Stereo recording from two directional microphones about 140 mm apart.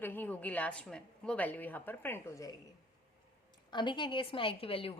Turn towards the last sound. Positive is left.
turn(degrees=40)  # may be behind; listen again after turning